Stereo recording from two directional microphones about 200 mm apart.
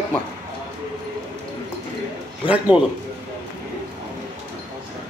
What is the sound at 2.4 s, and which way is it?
Speech, 5° right (ahead or behind).